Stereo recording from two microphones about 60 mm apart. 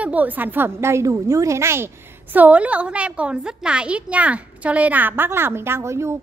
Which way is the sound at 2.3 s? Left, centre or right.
Right.